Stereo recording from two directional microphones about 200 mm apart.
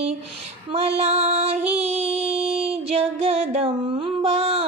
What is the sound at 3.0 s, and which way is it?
Music, 30° right (ahead or behind).